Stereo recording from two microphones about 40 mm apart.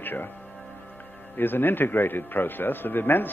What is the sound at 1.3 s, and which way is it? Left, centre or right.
A man's voice, left.